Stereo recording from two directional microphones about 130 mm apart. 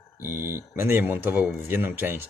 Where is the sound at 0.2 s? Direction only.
15° right (ahead or behind).